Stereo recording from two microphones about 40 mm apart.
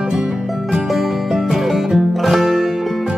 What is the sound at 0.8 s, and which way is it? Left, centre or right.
Music, centre.